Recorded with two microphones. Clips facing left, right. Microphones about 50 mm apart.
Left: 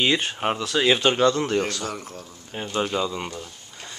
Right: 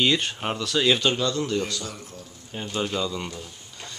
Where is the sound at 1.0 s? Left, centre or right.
Left.